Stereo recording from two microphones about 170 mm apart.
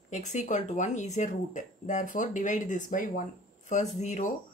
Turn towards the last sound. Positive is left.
turn(degrees=45)  # may be behind; listen again after turning